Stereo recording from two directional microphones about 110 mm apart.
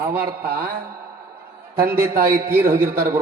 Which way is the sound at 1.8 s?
20° right (ahead or behind).